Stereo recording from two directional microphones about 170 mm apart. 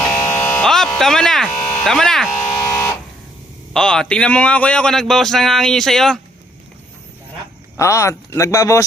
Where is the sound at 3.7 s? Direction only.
5° left (ahead or behind).